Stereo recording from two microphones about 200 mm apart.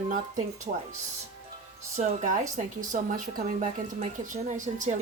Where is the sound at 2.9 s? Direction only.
40° right (ahead or behind).